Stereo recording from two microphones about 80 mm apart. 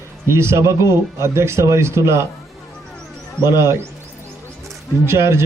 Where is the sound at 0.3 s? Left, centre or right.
Right.